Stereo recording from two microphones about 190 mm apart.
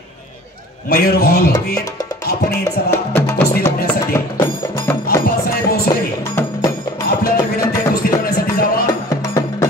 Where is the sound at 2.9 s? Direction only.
15° left (ahead or behind).